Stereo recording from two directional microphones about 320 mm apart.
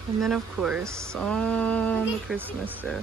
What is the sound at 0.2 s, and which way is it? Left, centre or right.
Speech, centre.